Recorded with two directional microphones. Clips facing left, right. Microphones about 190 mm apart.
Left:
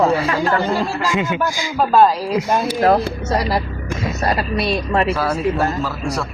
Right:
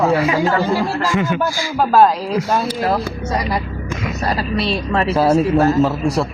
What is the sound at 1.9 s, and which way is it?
Speech, centre (ahead or behind).